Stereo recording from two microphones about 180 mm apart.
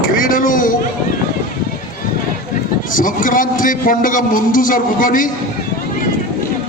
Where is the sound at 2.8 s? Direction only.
50° left (ahead or behind).